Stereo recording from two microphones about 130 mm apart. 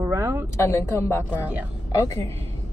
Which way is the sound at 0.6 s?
20° left (ahead or behind).